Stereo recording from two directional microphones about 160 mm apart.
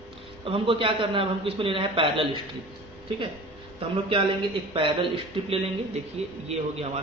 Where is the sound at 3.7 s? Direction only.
35° right (ahead or behind).